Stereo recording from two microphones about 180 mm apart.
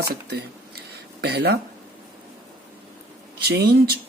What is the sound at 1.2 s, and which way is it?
Speech, 65° right (ahead or behind).